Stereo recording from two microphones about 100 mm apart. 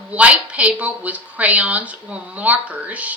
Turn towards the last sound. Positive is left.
turn(degrees=-15)  # may be behind; listen again after turning